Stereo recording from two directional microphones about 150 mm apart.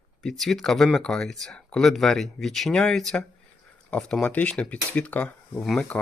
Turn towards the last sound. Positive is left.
turn(degrees=5)  # may be behind; listen again after turning